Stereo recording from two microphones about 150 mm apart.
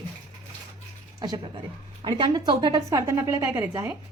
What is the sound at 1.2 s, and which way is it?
A woman's voice, 25° right (ahead or behind).